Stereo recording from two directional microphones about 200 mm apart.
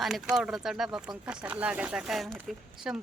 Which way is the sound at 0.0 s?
Centre (ahead or behind).